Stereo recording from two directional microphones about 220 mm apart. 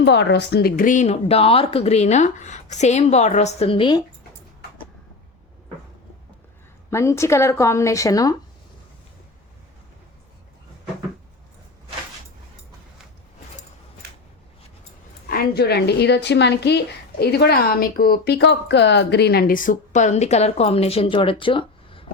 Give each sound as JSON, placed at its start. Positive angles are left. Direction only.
{"t": 0.0, "sound": "speech", "side_deg": 50}
{"t": 6.9, "sound": "a woman's voice", "side_deg": 15}
{"t": 15.3, "sound": "a woman's voice", "side_deg": 45}